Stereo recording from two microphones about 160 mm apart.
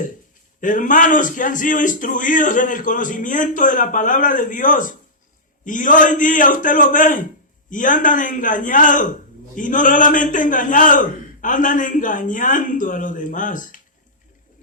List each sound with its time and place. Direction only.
0.6 s a man's voice: 55° left (ahead or behind)